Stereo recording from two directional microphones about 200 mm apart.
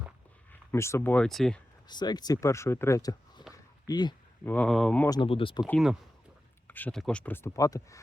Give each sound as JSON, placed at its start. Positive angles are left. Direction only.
{"t": 0.7, "sound": "speech", "side_deg": 15}
{"t": 1.9, "sound": "speech", "side_deg": 20}
{"t": 3.5, "sound": "a sound", "side_deg": 20}
{"t": 4.4, "sound": "speech", "side_deg": 5}
{"t": 5.0, "sound": "speech", "side_deg": 20}
{"t": 5.6, "sound": "speech", "side_deg": 0}